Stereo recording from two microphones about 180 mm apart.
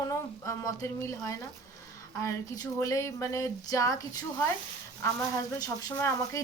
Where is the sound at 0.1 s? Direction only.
15° left (ahead or behind).